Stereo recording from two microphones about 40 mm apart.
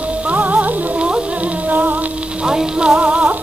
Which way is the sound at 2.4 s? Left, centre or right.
Centre.